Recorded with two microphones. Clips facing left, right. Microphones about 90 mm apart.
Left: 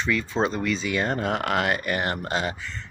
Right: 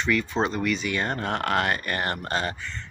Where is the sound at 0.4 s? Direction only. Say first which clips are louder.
Left 1 dB; 15° left (ahead or behind).